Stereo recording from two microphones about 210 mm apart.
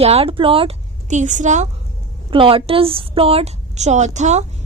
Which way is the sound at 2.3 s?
25° right (ahead or behind).